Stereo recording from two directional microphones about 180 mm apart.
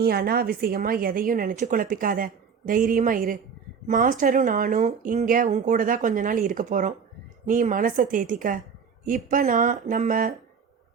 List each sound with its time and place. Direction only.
0.0 s a woman's voice: 60° right (ahead or behind)